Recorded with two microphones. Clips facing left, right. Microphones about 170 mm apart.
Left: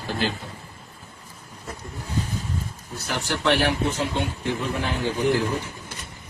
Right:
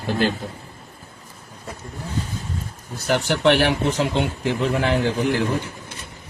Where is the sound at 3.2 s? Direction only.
85° right.